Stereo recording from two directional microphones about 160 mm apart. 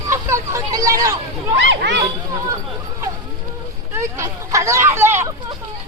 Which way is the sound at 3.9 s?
20° right (ahead or behind).